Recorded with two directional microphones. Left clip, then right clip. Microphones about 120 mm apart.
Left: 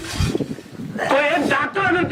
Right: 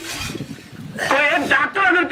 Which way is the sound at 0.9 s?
30° right (ahead or behind).